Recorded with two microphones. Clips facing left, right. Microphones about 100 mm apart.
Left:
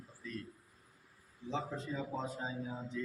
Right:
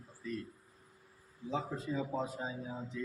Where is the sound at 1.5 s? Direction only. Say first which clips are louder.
Right 2 dB; 5° right (ahead or behind).